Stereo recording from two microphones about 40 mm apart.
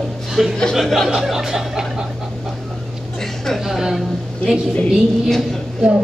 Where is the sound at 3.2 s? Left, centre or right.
Centre.